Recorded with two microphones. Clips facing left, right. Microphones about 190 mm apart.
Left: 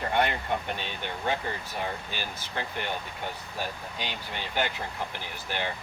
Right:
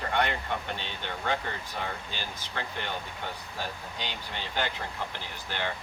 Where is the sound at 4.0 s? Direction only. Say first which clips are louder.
Left 2 dB; 15° left (ahead or behind).